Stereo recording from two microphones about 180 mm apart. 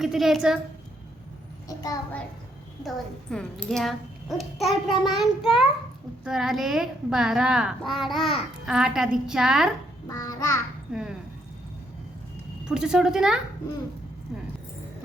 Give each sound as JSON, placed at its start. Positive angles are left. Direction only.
{"t": 0.0, "sound": "a woman's voice", "side_deg": 0}
{"t": 1.6, "sound": "a sound", "side_deg": 20}
{"t": 2.8, "sound": "a woman's voice", "side_deg": 5}
{"t": 10.1, "sound": "a child's voice", "side_deg": 20}
{"t": 10.9, "sound": "a woman's voice", "side_deg": -5}
{"t": 12.6, "sound": "a woman's voice", "side_deg": -5}